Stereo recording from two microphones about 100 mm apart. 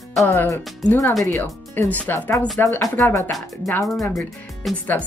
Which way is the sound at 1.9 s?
15° left (ahead or behind).